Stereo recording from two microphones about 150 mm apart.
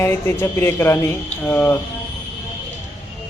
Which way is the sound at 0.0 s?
15° left (ahead or behind).